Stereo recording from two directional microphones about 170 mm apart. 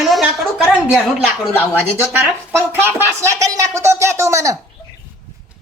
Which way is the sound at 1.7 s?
10° right (ahead or behind).